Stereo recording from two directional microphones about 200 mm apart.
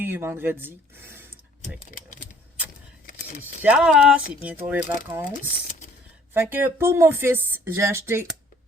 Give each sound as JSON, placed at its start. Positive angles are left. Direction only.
{"t": 0.0, "sound": "speech", "side_deg": -10}
{"t": 3.6, "sound": "speech", "side_deg": -5}
{"t": 6.3, "sound": "speech", "side_deg": -10}